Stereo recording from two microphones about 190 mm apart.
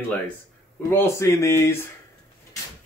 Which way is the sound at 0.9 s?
15° left (ahead or behind).